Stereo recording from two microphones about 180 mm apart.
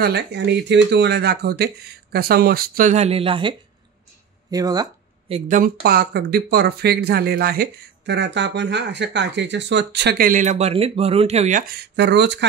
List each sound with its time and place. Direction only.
0.0 s speech: 70° right (ahead or behind)
2.9 s speech: 35° right (ahead or behind)
5.3 s speech: 45° right (ahead or behind); by 12.4 s 75° right (ahead or behind)